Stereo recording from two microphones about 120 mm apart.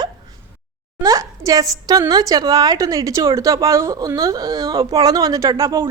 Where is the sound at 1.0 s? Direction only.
30° right (ahead or behind).